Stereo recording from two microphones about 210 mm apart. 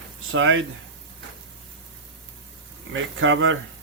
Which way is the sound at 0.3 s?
65° right (ahead or behind).